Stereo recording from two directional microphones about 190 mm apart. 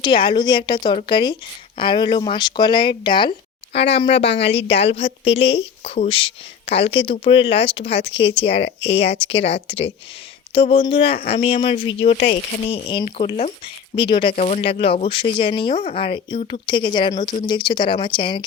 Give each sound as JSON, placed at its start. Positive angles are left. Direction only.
{"t": 0.0, "sound": "a woman's voice", "side_deg": 25}
{"t": 14.3, "sound": "a woman's voice", "side_deg": 35}